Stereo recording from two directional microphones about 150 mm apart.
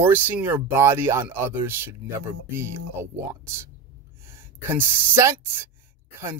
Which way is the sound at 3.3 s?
20° right (ahead or behind).